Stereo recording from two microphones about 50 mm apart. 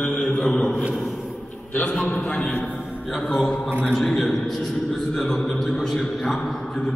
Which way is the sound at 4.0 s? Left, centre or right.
Centre.